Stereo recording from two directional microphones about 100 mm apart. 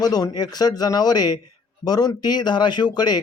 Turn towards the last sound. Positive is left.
turn(degrees=45)  # may be behind; listen again after turning